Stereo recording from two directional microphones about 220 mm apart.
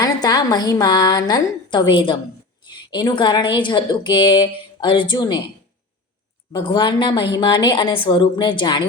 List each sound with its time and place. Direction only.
0.0 s a woman's voice: 20° left (ahead or behind)
6.5 s a woman's voice: 20° left (ahead or behind)